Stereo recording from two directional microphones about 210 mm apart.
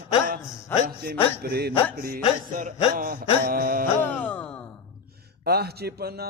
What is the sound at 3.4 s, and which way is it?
Speech, 45° right (ahead or behind).